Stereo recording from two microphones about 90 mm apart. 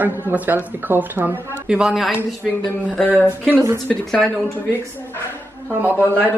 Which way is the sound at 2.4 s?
15° left (ahead or behind).